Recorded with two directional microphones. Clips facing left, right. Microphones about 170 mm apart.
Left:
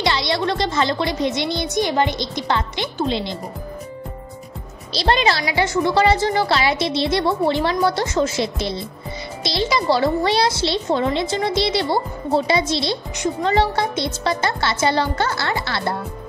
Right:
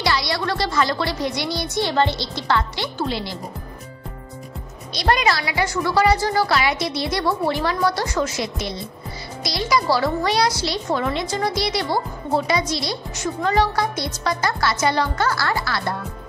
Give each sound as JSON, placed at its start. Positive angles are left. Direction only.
{"t": 0.0, "sound": "a child's voice", "side_deg": 25}
{"t": 4.9, "sound": "a child's voice", "side_deg": 30}